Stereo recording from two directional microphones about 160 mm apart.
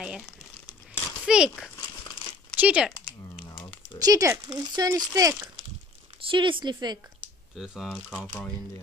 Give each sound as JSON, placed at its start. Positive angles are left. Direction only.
{"t": 1.2, "sound": "a child's voice", "side_deg": -5}
{"t": 1.8, "sound": "crumpling", "side_deg": 25}
{"t": 2.5, "sound": "speech", "side_deg": -10}
{"t": 4.0, "sound": "speech", "side_deg": -20}
{"t": 7.5, "sound": "speech", "side_deg": -5}